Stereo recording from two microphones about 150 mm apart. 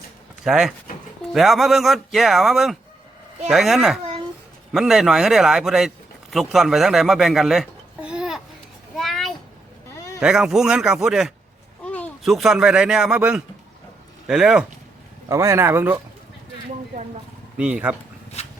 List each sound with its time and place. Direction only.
0.4 s speech: 5° right (ahead or behind)
9.0 s a sound: centre (ahead or behind)
10.2 s speech: 5° right (ahead or behind)
11.9 s a sound: 10° left (ahead or behind)
12.2 s speech: centre (ahead or behind)
15.3 s speech: 20° right (ahead or behind)
17.6 s speech: 5° right (ahead or behind)
18.4 s rub: 45° left (ahead or behind)